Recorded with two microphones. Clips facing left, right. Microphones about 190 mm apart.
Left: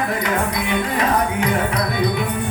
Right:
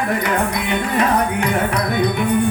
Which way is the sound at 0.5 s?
65° right (ahead or behind).